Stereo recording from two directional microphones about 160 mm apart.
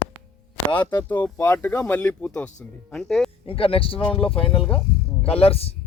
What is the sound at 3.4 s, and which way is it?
Speech, 35° left (ahead or behind).